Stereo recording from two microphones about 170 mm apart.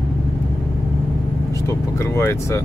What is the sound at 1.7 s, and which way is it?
Vehicle, 15° left (ahead or behind).